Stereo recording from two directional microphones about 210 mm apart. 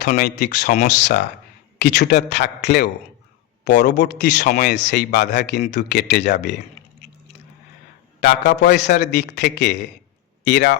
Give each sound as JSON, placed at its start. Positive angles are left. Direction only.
{"t": 0.2, "sound": "speech", "side_deg": 50}
{"t": 3.9, "sound": "speech", "side_deg": 50}
{"t": 8.2, "sound": "speech", "side_deg": 55}